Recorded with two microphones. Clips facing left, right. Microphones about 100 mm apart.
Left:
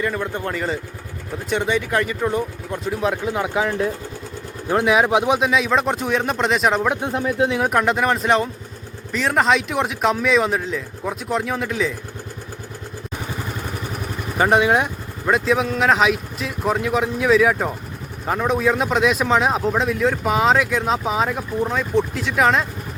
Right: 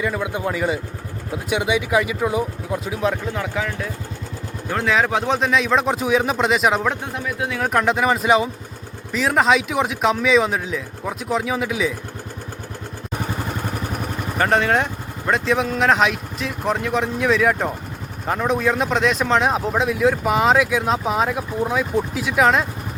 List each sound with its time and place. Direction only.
0.0 s speech: 5° right (ahead or behind)
3.3 s speech: 20° left (ahead or behind)
4.7 s a man's voice: 15° left (ahead or behind); by 6.8 s centre (ahead or behind)
6.8 s speech: 10° left (ahead or behind)
7.1 s speech: 30° left (ahead or behind)
7.6 s a man's voice: centre (ahead or behind)
14.3 s a man's voice: 10° left (ahead or behind)